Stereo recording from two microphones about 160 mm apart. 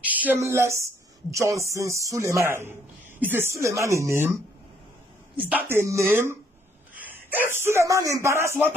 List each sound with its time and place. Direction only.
0.0 s a woman's voice: 10° right (ahead or behind)